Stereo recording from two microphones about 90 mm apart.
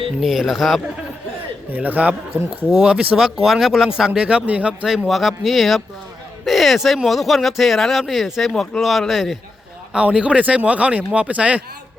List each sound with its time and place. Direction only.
0.2 s speech: centre (ahead or behind)
1.7 s speech: 20° right (ahead or behind)
5.0 s speech: centre (ahead or behind)
9.9 s speech: 10° right (ahead or behind)